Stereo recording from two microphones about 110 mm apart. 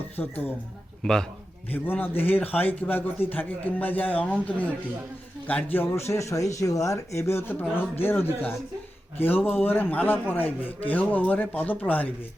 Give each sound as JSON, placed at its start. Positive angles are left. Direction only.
{"t": 0.2, "sound": "a man's voice", "side_deg": 15}
{"t": 1.0, "sound": "a man's voice", "side_deg": 5}
{"t": 1.7, "sound": "a man's voice", "side_deg": 15}